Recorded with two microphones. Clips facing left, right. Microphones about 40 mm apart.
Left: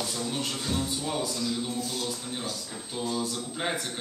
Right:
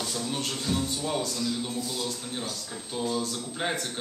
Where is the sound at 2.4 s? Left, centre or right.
Centre.